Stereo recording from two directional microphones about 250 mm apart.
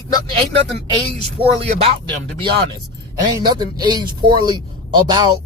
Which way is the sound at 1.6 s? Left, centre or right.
Right.